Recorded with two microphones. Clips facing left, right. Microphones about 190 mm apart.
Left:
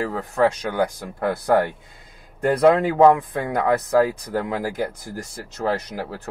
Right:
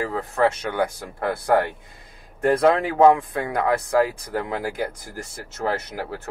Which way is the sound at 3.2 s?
20° left (ahead or behind).